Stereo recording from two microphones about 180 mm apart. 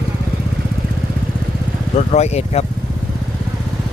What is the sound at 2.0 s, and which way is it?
Speech, 35° left (ahead or behind).